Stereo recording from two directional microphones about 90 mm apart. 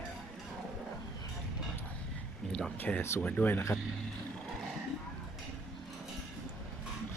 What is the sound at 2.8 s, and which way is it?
Speech, 25° left (ahead or behind).